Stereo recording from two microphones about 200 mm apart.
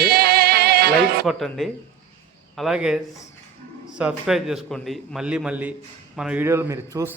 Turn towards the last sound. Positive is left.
turn(degrees=-15)  # may be behind; listen again after turning